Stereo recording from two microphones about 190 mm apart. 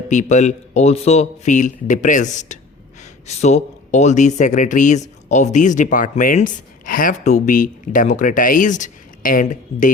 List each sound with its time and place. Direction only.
0.1 s speech: 40° left (ahead or behind)